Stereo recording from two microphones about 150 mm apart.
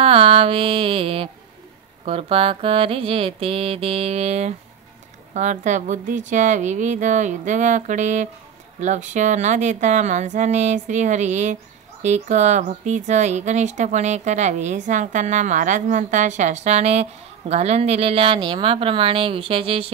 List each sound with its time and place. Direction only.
0.0 s speech: 40° right (ahead or behind)
2.0 s music: 40° right (ahead or behind)
5.3 s speech: 55° right (ahead or behind)